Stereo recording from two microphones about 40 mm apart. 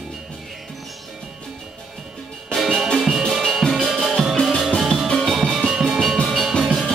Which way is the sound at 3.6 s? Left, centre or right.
Left.